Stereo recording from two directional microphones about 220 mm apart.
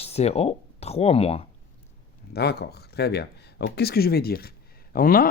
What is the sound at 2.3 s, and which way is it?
Speech, 45° left (ahead or behind).